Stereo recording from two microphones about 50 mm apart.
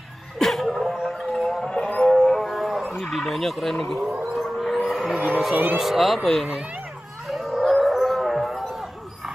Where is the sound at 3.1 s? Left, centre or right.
Centre.